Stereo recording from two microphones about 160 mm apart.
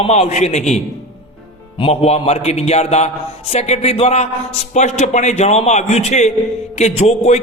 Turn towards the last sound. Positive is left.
turn(degrees=45)  # may be behind; listen again after turning